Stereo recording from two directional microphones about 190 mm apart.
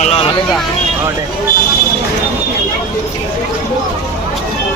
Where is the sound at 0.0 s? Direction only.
35° left (ahead or behind).